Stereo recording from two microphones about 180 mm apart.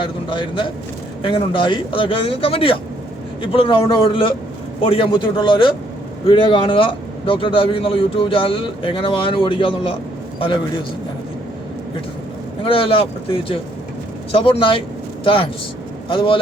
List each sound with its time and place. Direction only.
0.0 s a man's voice: 30° left (ahead or behind)
12.6 s a man's voice: 30° left (ahead or behind)